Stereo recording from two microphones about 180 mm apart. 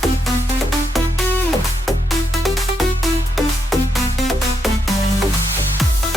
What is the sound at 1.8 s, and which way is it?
Music, centre (ahead or behind).